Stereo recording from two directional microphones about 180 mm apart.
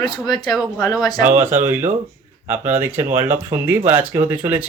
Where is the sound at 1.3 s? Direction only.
10° right (ahead or behind).